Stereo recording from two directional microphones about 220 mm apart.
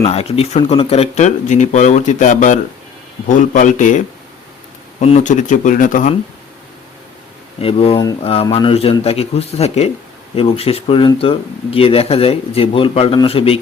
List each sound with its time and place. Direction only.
0.0 s speech: 30° left (ahead or behind)
7.6 s speech: 25° left (ahead or behind)